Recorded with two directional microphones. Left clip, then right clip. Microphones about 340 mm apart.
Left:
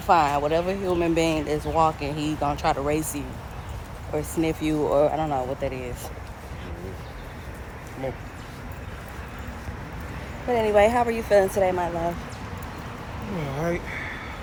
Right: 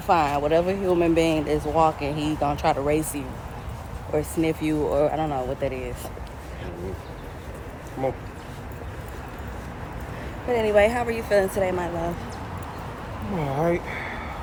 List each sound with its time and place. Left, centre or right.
0.1 s speech: centre
10.5 s speech: centre
13.4 s speech: centre